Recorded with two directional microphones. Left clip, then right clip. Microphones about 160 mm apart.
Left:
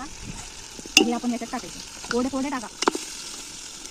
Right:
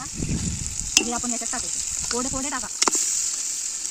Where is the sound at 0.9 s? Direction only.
15° right (ahead or behind).